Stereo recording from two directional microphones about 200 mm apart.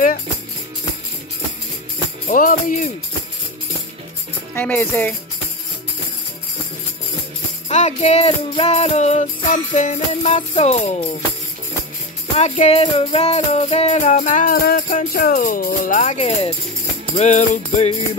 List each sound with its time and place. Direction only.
2.2 s music: 40° left (ahead or behind)
4.6 s speech: 10° left (ahead or behind)
7.6 s music: 35° left (ahead or behind)
12.4 s music: 30° left (ahead or behind)